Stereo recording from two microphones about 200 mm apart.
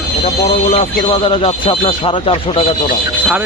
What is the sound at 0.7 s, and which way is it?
Speech, 30° left (ahead or behind).